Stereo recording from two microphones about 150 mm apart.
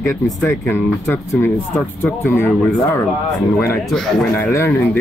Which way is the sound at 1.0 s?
15° left (ahead or behind).